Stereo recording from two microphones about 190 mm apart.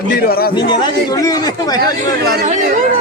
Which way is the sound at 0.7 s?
20° left (ahead or behind).